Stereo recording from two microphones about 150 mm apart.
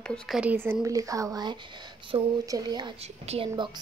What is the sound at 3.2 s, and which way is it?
Speech, 45° right (ahead or behind).